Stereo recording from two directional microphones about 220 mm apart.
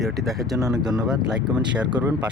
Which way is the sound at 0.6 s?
15° right (ahead or behind).